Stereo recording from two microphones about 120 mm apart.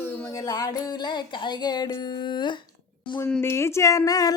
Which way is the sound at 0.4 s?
30° left (ahead or behind).